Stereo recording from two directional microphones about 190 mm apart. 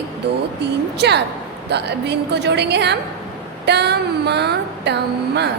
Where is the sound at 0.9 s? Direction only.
65° right (ahead or behind).